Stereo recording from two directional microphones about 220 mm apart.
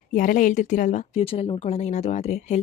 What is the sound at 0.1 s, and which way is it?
A woman's voice, 35° left (ahead or behind).